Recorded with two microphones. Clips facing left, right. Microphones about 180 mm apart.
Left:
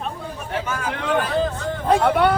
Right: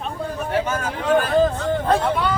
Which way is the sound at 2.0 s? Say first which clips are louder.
Left 4 dB; 65° left (ahead or behind).